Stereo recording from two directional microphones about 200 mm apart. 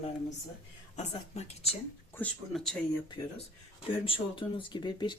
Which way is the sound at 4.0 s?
25° left (ahead or behind).